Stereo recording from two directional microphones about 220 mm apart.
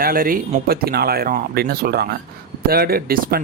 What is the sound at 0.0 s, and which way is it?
Speech, 40° right (ahead or behind).